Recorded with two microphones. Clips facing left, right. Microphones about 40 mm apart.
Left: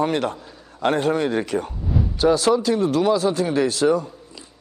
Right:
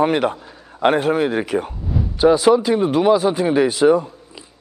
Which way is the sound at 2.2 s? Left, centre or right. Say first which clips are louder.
Right 5 dB; centre.